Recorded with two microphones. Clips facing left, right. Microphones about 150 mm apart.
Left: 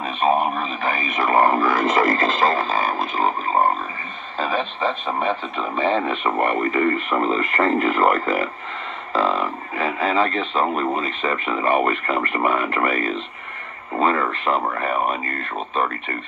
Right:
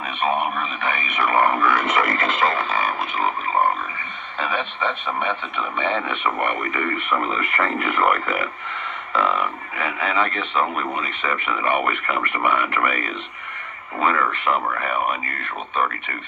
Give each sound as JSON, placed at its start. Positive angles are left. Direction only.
{"t": 0.0, "sound": "speech", "side_deg": 35}